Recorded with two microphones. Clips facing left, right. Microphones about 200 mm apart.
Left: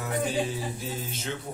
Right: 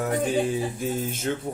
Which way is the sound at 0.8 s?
50° right (ahead or behind).